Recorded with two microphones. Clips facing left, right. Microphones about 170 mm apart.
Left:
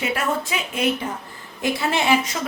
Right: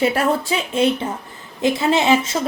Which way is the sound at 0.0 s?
35° right (ahead or behind).